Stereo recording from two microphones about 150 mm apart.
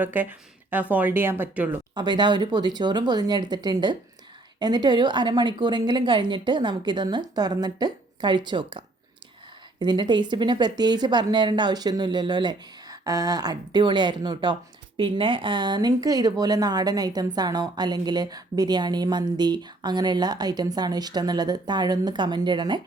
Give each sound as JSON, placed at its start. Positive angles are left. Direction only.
{"t": 0.0, "sound": "speech", "side_deg": -10}
{"t": 2.0, "sound": "speech", "side_deg": -30}
{"t": 9.8, "sound": "speech", "side_deg": -30}